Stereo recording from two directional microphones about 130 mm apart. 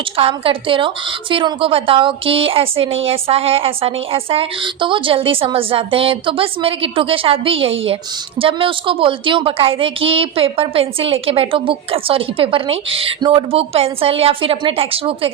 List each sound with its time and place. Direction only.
0.2 s a woman's voice: 45° right (ahead or behind)